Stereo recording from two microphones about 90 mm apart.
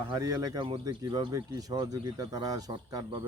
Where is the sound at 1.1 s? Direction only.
50° right (ahead or behind).